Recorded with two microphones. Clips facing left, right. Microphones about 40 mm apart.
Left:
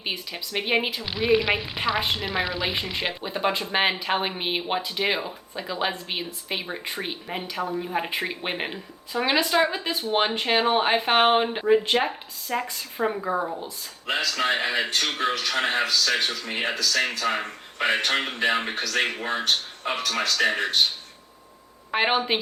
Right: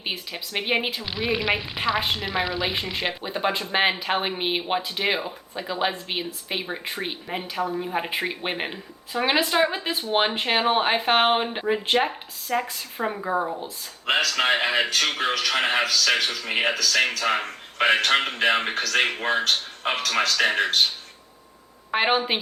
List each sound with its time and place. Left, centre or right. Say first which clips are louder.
0.0 s speech: even; centre
9.1 s speech: even; centre
14.1 s speech: right 3 dB; right
15.0 s speech: right 2 dB; right
21.9 s speech: right 1 dB; centre